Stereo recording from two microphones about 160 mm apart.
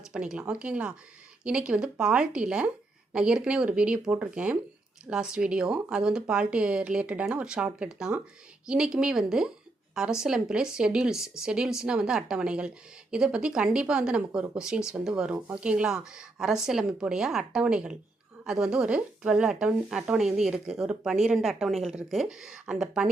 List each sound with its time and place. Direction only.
0.1 s a woman's voice: 5° right (ahead or behind)